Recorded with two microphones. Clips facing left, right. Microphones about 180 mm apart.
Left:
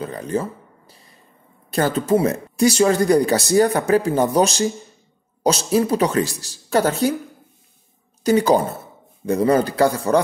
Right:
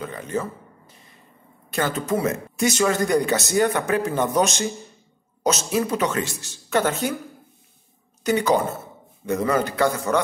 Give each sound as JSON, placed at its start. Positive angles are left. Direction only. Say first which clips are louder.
{"t": 0.0, "sound": "a sound", "louder": "left 4 dB", "side_deg": 35}
{"t": 1.7, "sound": "speech", "louder": "left 6 dB", "side_deg": 35}
{"t": 8.2, "sound": "a man's voice", "louder": "left 4 dB", "side_deg": 35}